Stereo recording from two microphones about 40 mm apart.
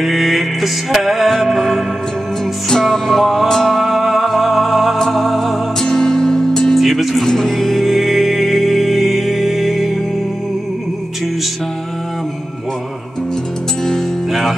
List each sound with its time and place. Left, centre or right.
0.0 s music: centre
5.8 s music: centre
6.8 s music: centre